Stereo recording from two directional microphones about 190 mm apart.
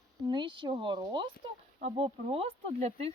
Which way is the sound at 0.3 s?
25° right (ahead or behind).